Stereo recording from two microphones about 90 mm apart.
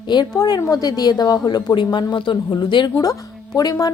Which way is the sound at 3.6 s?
45° left (ahead or behind).